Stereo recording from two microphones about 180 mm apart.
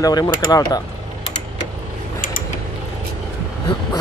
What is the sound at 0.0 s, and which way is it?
Speech, 20° left (ahead or behind).